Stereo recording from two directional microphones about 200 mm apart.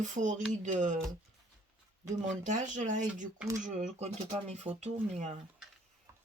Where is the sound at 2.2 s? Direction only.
40° right (ahead or behind).